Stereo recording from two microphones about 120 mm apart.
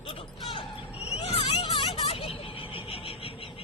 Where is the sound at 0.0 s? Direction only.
50° left (ahead or behind).